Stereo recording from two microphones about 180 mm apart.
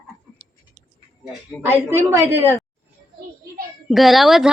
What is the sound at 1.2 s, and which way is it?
Speech, centre (ahead or behind).